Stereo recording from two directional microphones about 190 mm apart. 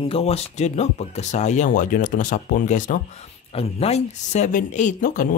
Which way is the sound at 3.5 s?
30° left (ahead or behind).